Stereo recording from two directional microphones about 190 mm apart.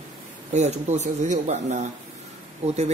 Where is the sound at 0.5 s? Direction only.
35° right (ahead or behind).